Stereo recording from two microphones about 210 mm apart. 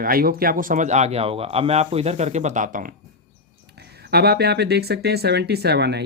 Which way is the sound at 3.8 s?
50° right (ahead or behind).